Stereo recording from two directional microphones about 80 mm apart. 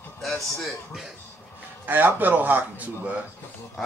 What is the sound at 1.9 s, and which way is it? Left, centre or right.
A man's voice, right.